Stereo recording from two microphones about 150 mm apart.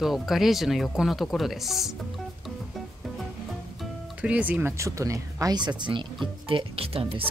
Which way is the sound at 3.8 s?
10° right (ahead or behind).